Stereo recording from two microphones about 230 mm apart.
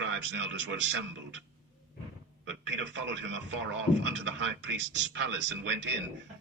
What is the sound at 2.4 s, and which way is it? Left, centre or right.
Speech, right.